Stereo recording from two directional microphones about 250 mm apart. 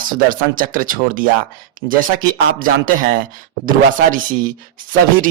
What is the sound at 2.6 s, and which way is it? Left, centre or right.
Speech, right.